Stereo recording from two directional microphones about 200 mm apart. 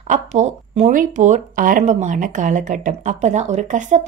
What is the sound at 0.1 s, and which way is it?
Speech, 35° right (ahead or behind).